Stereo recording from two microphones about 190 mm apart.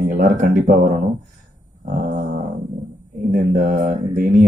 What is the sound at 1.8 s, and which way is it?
Dog, 45° right (ahead or behind).